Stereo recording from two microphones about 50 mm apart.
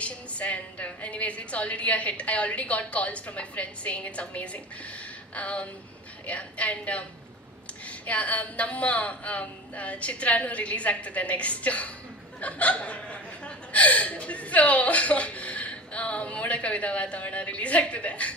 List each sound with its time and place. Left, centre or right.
0.0 s speech: left